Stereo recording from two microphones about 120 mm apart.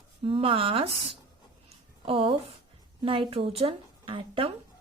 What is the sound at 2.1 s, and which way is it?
A woman's voice, 50° right (ahead or behind).